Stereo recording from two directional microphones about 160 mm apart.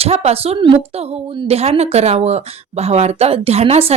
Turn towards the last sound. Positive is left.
turn(degrees=-40)  # may be behind; listen again after turning